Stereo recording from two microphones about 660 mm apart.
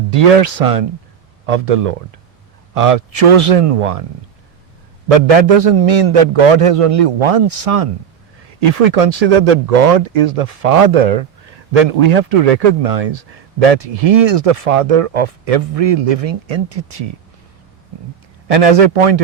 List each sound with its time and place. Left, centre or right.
0.1 s a man's voice: right
5.1 s a man's voice: right
18.4 s a man's voice: right